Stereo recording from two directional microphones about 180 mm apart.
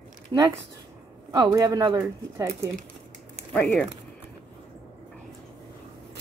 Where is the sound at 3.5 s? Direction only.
Centre (ahead or behind).